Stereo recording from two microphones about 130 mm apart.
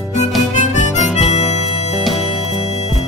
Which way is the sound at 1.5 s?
55° left (ahead or behind).